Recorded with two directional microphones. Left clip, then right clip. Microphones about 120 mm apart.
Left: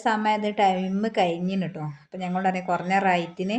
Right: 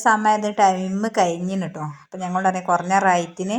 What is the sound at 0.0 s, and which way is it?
A woman's voice, 15° right (ahead or behind).